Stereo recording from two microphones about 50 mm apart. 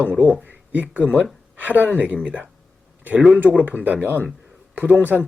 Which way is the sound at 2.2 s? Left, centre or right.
Centre.